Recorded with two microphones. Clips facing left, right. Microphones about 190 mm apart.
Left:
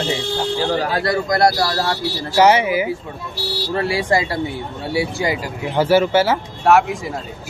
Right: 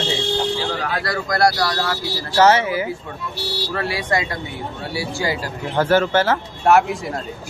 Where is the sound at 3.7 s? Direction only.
25° left (ahead or behind).